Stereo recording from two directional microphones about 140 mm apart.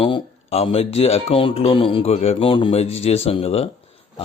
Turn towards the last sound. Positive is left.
turn(degrees=45)  # may be behind; listen again after turning